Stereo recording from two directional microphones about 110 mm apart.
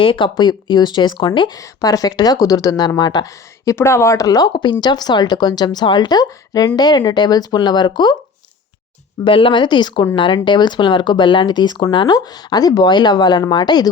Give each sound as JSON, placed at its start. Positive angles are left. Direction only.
{"t": 0.0, "sound": "speech", "side_deg": 50}
{"t": 1.5, "sound": "speech", "side_deg": 30}
{"t": 4.5, "sound": "speech", "side_deg": 45}
{"t": 9.2, "sound": "speech", "side_deg": 50}